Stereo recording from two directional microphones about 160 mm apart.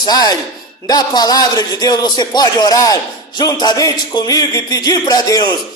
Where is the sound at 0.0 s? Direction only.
25° left (ahead or behind).